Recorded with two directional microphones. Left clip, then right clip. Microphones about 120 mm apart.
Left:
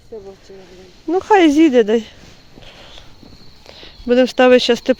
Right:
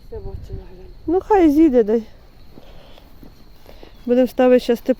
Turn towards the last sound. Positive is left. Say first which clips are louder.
# left 3 dB
turn(degrees=-45)  # may be behind; listen again after turning